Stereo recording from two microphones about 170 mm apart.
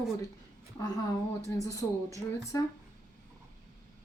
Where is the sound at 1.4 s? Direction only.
20° left (ahead or behind).